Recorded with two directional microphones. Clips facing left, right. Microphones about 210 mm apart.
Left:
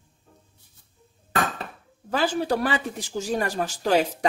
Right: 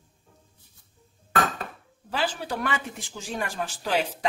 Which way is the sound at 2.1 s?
45° left (ahead or behind).